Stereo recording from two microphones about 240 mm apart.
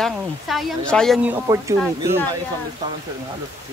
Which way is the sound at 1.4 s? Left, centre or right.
Centre.